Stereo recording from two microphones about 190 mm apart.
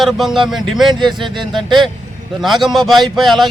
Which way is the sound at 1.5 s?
25° right (ahead or behind).